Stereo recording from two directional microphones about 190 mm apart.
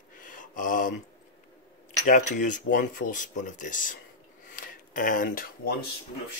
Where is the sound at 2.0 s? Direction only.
40° left (ahead or behind).